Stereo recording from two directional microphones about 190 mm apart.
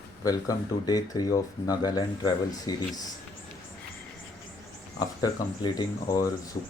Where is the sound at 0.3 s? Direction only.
20° left (ahead or behind).